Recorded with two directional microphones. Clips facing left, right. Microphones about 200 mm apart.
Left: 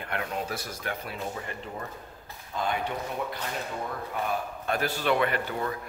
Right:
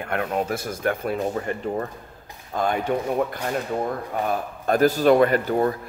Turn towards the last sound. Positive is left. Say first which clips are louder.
# right 9 dB
turn(degrees=-40)  # may be behind; listen again after turning